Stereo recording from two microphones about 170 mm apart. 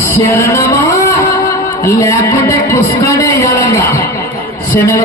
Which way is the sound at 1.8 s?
15° left (ahead or behind).